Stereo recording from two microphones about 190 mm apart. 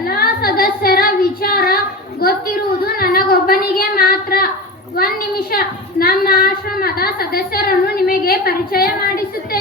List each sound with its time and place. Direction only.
0.0 s female singing: 50° left (ahead or behind)
2.2 s a woman's voice: 50° left (ahead or behind)